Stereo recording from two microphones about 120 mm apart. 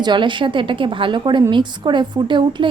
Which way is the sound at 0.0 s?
40° right (ahead or behind).